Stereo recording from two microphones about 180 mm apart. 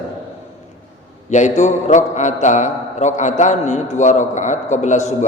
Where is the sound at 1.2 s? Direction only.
40° left (ahead or behind).